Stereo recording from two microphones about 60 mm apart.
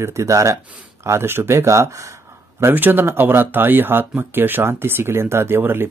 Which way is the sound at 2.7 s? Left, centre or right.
Right.